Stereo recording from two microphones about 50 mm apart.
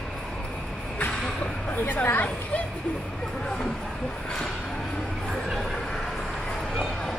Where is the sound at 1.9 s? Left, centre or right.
Left.